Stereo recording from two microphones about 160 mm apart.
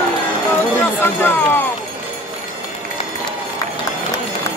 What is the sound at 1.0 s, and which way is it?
Speech, 15° left (ahead or behind).